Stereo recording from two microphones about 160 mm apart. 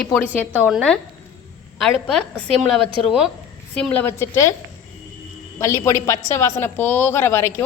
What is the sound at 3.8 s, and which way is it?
Speech, 10° left (ahead or behind).